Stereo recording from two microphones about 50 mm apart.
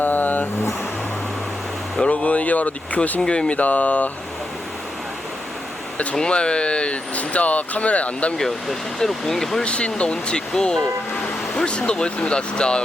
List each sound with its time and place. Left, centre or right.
0.0 s vehicle: left
2.0 s speech: left
3.2 s speech: centre
3.6 s speech: left
6.1 s speech: centre
9.0 s speech: centre
9.6 s speech: left